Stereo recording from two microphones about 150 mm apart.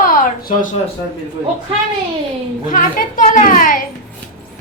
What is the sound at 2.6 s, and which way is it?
A child's voice, 60° left (ahead or behind).